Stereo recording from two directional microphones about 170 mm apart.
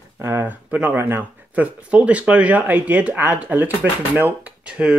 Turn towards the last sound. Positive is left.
turn(degrees=-5)  # may be behind; listen again after turning